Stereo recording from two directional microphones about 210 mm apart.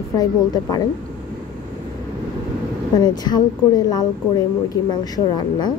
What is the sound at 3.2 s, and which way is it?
A woman's voice, 20° left (ahead or behind).